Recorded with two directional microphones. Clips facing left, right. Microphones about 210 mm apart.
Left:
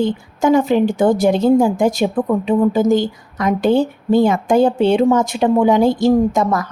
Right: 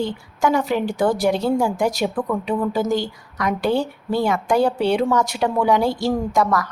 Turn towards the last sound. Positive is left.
turn(degrees=25)  # may be behind; listen again after turning